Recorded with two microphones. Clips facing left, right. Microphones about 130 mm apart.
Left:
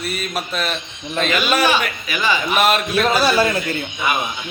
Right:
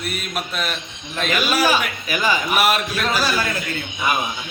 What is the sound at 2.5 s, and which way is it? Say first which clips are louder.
Speech: left 3 dB; 5° right (ahead or behind).